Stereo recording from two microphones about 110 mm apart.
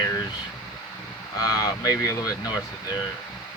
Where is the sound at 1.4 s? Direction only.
30° left (ahead or behind).